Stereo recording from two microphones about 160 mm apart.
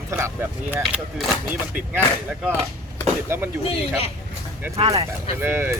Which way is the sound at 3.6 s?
40° left (ahead or behind).